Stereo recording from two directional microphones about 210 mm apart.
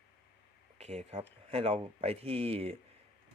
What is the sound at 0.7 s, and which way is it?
Speech, 30° right (ahead or behind).